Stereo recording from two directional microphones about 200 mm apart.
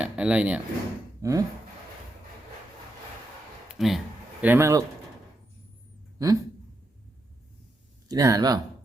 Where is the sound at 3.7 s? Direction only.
Centre (ahead or behind).